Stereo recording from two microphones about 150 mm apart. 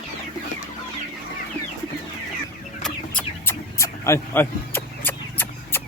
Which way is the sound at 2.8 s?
10° left (ahead or behind).